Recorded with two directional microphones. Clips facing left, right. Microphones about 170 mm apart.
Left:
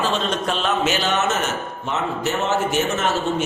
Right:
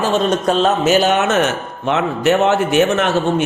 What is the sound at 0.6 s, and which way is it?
A man's voice, 40° right (ahead or behind).